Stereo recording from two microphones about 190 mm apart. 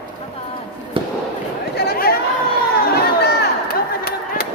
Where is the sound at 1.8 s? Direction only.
55° left (ahead or behind).